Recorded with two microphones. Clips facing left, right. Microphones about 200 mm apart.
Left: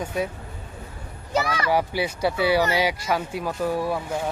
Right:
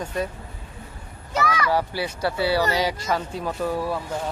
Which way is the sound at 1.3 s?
30° left (ahead or behind).